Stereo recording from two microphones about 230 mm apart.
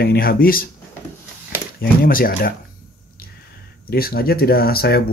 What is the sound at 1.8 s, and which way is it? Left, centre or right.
Speech, left.